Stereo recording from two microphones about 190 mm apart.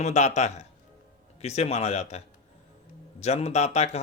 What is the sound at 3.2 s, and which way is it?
Speech, 35° left (ahead or behind).